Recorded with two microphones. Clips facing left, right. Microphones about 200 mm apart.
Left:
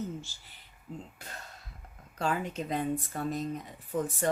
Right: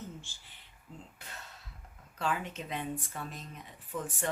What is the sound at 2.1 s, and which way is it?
Speech, 40° left (ahead or behind).